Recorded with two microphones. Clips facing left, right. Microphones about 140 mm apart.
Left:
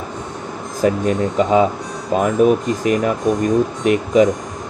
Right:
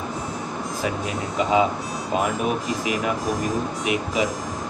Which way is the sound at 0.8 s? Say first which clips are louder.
Left 11 dB; 45° left (ahead or behind).